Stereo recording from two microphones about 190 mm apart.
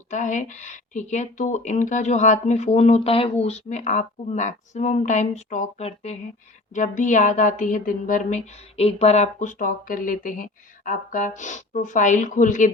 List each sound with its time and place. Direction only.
0.1 s speech: 40° left (ahead or behind)